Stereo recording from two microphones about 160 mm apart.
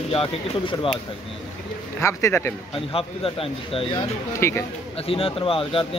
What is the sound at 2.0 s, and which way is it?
Speech, 15° left (ahead or behind).